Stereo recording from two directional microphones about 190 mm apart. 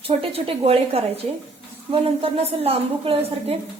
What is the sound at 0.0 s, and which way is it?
A woman's voice, 30° right (ahead or behind).